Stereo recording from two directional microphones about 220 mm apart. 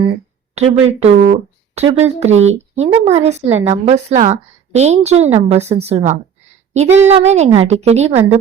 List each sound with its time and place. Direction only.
0.5 s a woman's voice: 30° right (ahead or behind)
6.7 s a sound: 30° right (ahead or behind)
7.1 s a woman's voice: 30° right (ahead or behind)